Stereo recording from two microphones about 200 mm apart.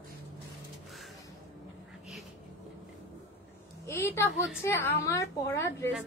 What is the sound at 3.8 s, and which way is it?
Speech, 15° left (ahead or behind).